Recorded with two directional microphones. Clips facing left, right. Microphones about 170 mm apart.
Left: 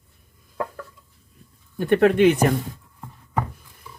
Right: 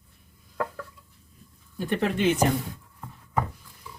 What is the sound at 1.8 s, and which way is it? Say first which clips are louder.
Speech: left 9 dB; 65° left (ahead or behind).